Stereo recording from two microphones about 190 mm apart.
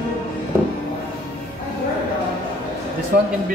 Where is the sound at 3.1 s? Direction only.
50° right (ahead or behind).